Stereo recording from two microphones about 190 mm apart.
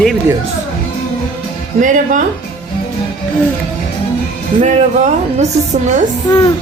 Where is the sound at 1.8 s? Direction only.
45° right (ahead or behind).